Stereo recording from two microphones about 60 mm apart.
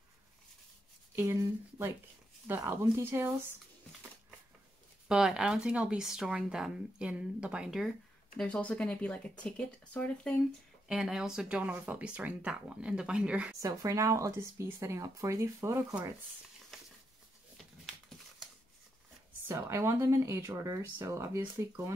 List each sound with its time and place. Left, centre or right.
1.1 s speech: right
2.4 s speech: right
5.0 s speech: centre
5.9 s speech: centre
8.4 s speech: centre
10.9 s speech: centre
11.4 s speech: centre
13.6 s a woman's voice: right
16.7 s a sound: centre
19.4 s a woman's voice: right
20.6 s a woman's voice: right